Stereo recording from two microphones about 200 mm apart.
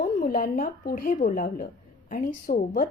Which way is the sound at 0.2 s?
45° left (ahead or behind).